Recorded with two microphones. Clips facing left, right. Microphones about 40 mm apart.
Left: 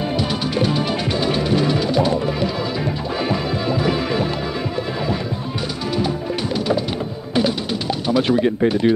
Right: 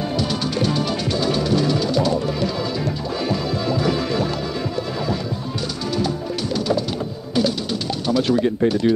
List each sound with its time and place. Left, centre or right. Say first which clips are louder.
0.6 s music: left 2 dB; left
5.9 s music: left 2 dB; left
8.1 s speech: left 1 dB; left